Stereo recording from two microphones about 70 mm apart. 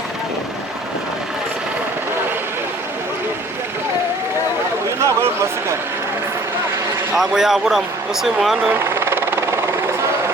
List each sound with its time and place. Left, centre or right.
4.9 s a sound: right
7.2 s a man's voice: centre
8.7 s helicopter: right